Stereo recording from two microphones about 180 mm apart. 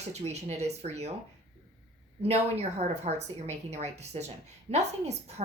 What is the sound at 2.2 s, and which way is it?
Speech, 35° right (ahead or behind).